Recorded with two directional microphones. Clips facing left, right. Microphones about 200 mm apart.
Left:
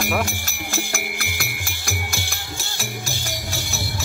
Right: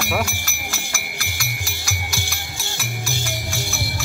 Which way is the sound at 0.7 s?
55° left (ahead or behind).